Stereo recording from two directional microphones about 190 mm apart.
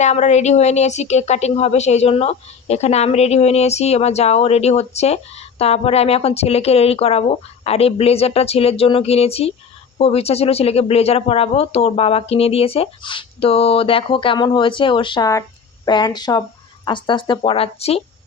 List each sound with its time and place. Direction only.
0.0 s a woman's voice: 35° left (ahead or behind)